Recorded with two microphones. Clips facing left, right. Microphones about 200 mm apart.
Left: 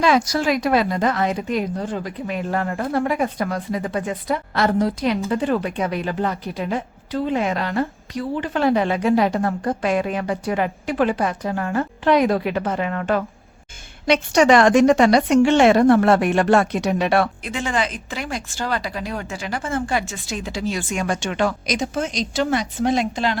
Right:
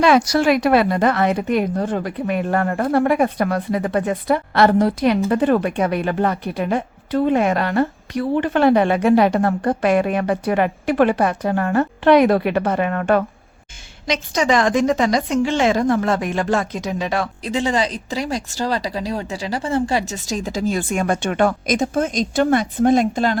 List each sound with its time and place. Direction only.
0.0 s a woman's voice: 65° right (ahead or behind)
14.1 s a woman's voice: 65° left (ahead or behind)
17.4 s a woman's voice: 35° right (ahead or behind)